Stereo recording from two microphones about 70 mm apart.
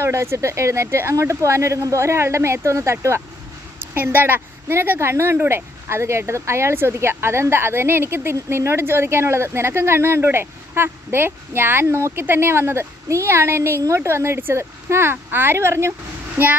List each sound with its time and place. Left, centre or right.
0.0 s speech: right
3.9 s speech: right